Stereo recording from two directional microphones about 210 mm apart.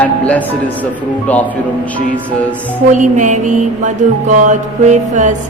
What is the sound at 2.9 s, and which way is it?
Music, 35° right (ahead or behind).